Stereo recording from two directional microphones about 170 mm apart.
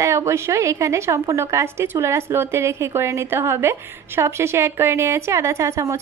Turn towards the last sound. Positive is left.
turn(degrees=-15)  # may be behind; listen again after turning